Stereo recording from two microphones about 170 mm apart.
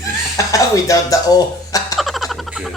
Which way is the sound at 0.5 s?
20° left (ahead or behind).